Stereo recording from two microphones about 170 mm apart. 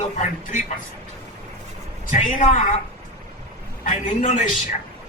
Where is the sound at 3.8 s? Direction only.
50° left (ahead or behind).